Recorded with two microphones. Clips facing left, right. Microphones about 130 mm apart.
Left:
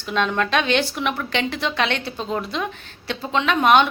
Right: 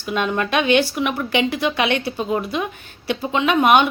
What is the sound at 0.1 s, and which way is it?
Speech, 10° right (ahead or behind).